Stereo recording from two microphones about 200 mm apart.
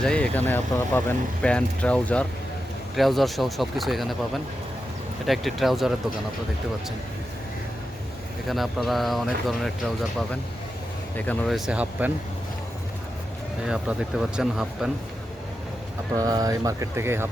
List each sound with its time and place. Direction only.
0.0 s speech: 5° left (ahead or behind)
5.2 s speech: centre (ahead or behind)
8.4 s speech: centre (ahead or behind)
11.3 s speech: centre (ahead or behind)
13.7 s speech: 5° right (ahead or behind)
16.1 s speech: 20° right (ahead or behind)